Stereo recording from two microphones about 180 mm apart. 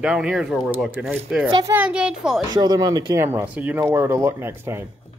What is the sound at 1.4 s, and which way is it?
Speech, 25° right (ahead or behind).